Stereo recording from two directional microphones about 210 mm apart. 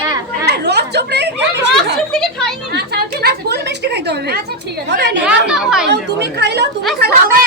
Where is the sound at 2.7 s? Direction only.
50° right (ahead or behind).